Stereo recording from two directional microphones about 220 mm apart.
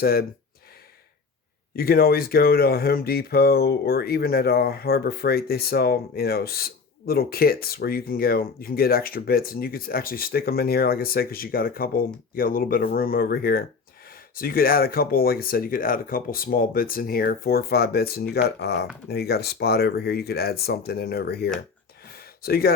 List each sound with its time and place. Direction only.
0.0 s speech: 45° left (ahead or behind)
1.7 s speech: 45° left (ahead or behind)